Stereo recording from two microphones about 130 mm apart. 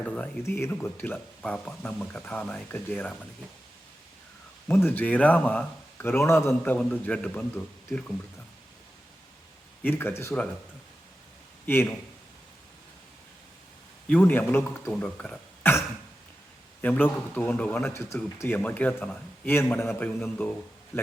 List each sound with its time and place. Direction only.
0.0 s speech: 10° left (ahead or behind)
4.7 s speech: 15° left (ahead or behind)
9.8 s speech: 15° left (ahead or behind)
11.6 s a man's voice: 15° left (ahead or behind)
14.1 s speech: 10° left (ahead or behind)
16.8 s speech: 10° left (ahead or behind)